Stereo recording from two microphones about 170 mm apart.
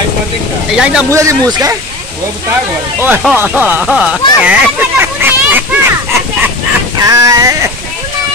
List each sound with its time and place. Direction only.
0.7 s speech: 5° right (ahead or behind)
1.1 s speech: 20° right (ahead or behind)
3.0 s speech: 10° right (ahead or behind)
7.0 s speech: 20° right (ahead or behind)